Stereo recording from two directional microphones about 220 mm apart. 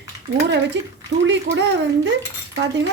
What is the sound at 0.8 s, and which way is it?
A woman's voice, 55° right (ahead or behind).